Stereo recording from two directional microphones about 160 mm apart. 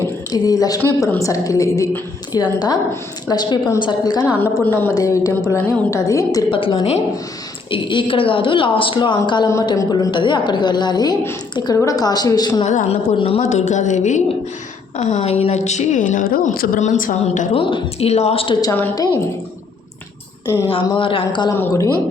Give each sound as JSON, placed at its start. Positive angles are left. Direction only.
{"t": 0.3, "sound": "a woman's voice", "side_deg": 25}
{"t": 4.5, "sound": "a woman's voice", "side_deg": 10}
{"t": 6.5, "sound": "a woman's voice", "side_deg": 30}
{"t": 12.6, "sound": "a woman's voice", "side_deg": 50}
{"t": 13.1, "sound": "speech", "side_deg": 35}
{"t": 13.4, "sound": "a woman's voice", "side_deg": 45}
{"t": 17.5, "sound": "speech", "side_deg": 30}
{"t": 18.6, "sound": "a woman's voice", "side_deg": 20}
{"t": 20.7, "sound": "speech", "side_deg": 35}
{"t": 21.5, "sound": "a woman's voice", "side_deg": 15}